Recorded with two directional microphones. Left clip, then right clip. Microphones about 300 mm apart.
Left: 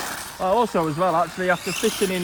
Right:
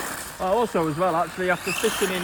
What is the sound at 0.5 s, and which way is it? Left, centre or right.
Speech, left.